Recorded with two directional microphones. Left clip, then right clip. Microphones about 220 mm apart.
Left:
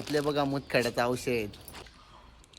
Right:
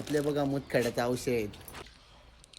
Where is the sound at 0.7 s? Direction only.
5° right (ahead or behind).